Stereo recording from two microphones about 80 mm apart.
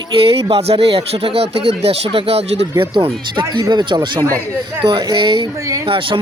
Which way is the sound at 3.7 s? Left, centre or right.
Right.